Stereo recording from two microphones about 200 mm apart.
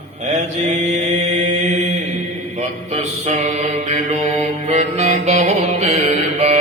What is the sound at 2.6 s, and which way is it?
Mantra, 35° right (ahead or behind).